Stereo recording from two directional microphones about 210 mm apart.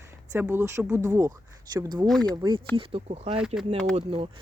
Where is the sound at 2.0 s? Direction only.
5° left (ahead or behind).